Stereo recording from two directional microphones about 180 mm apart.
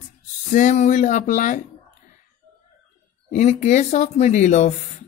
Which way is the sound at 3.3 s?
40° left (ahead or behind).